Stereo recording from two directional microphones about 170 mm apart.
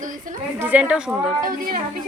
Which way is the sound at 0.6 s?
10° right (ahead or behind).